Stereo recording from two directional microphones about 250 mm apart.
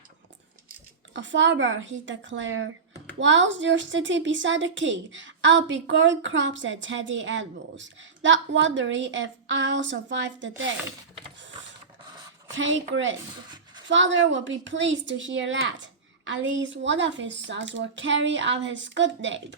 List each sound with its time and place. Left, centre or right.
1.1 s a woman's voice: right
12.5 s a woman's voice: right